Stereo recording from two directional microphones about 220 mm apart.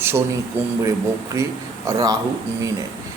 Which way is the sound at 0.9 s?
15° right (ahead or behind).